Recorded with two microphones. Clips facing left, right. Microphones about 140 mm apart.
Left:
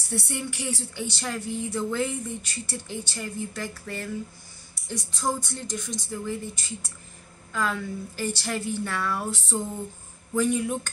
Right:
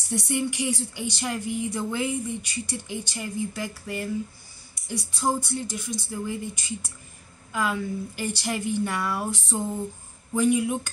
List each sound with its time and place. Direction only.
0.1 s speech: 15° right (ahead or behind)